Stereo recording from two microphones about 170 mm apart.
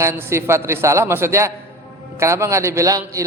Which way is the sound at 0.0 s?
15° right (ahead or behind).